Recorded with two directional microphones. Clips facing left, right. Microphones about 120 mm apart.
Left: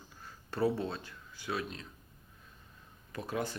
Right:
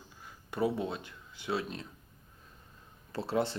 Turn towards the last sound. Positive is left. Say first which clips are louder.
# right 5 dB
turn(degrees=-25)  # may be behind; listen again after turning